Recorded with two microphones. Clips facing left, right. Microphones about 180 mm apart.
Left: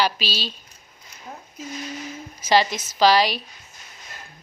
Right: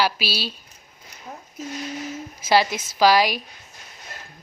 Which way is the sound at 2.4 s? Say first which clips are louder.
Even; 10° right (ahead or behind).